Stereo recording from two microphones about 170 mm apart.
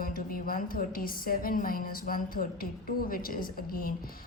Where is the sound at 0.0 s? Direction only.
55° left (ahead or behind).